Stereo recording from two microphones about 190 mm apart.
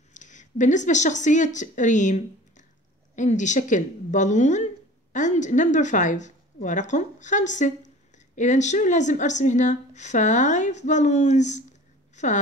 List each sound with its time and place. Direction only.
0.1 s a woman's voice: 40° left (ahead or behind)